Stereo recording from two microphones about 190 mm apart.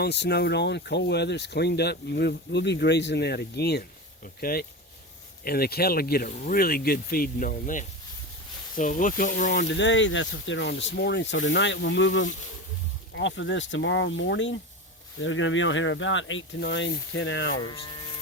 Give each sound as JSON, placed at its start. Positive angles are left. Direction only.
{"t": 0.0, "sound": "speech", "side_deg": 60}
{"t": 9.5, "sound": "speech", "side_deg": 70}
{"t": 15.2, "sound": "speech", "side_deg": 90}
{"t": 17.7, "sound": "speech", "side_deg": 25}